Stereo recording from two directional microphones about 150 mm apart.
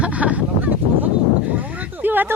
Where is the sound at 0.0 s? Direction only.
10° right (ahead or behind).